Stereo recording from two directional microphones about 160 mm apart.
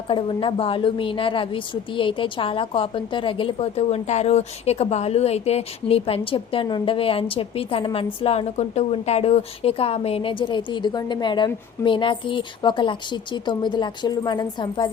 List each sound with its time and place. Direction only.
0.1 s a woman's voice: 30° left (ahead or behind)